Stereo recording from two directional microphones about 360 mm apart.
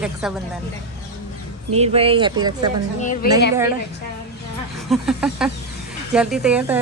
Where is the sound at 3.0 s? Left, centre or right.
Left.